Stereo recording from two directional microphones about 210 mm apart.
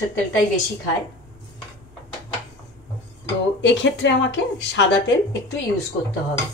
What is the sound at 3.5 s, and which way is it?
Speech, 60° left (ahead or behind).